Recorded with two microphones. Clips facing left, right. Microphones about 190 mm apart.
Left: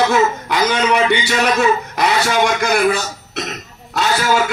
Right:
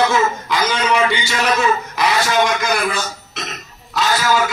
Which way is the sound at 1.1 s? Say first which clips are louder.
Left 4 dB; 65° left (ahead or behind).